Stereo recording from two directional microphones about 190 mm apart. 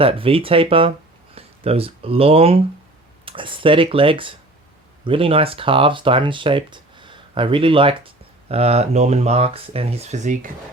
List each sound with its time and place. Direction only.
0.0 s speech: 30° right (ahead or behind)